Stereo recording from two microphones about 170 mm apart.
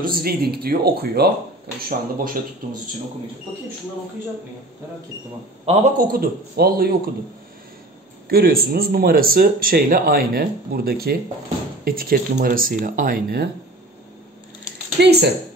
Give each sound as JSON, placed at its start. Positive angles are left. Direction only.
{"t": 0.1, "sound": "speech", "side_deg": -65}
{"t": 1.8, "sound": "speech", "side_deg": -55}
{"t": 5.9, "sound": "speech", "side_deg": -60}
{"t": 8.3, "sound": "speech", "side_deg": -65}
{"t": 15.0, "sound": "speech", "side_deg": -80}